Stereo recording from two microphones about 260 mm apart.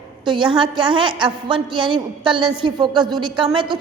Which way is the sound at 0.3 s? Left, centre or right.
Centre.